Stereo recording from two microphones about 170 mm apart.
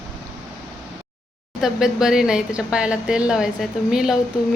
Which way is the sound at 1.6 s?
5° right (ahead or behind).